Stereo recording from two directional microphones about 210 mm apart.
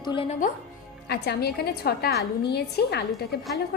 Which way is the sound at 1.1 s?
50° left (ahead or behind).